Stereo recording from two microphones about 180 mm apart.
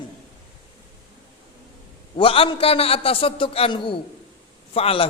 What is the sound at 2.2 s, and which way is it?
A man's voice, 30° left (ahead or behind).